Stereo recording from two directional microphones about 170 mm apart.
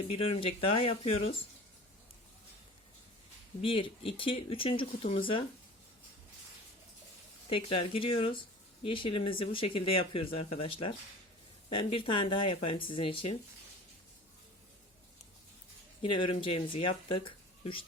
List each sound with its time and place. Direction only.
0.1 s speech: 35° left (ahead or behind)
3.6 s speech: 30° left (ahead or behind)
7.5 s speech: 30° left (ahead or behind)
16.0 s speech: 30° left (ahead or behind)